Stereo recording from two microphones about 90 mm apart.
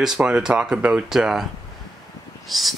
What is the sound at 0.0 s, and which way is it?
Speech, 10° right (ahead or behind).